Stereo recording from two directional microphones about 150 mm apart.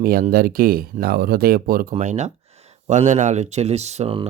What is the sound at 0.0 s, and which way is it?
Speech, 85° right.